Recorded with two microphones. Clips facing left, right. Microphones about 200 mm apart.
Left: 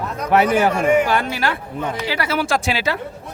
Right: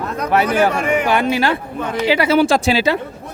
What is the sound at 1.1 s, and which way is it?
Speech, 25° right (ahead or behind).